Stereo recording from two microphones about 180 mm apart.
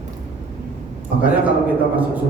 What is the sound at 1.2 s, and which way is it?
Speech, 10° right (ahead or behind).